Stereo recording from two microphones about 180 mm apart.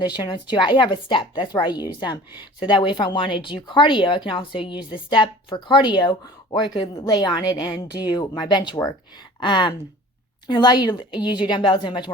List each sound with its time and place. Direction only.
0.0 s a woman's voice: 25° left (ahead or behind)